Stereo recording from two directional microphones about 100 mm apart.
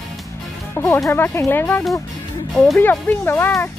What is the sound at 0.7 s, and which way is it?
Speech, 25° left (ahead or behind).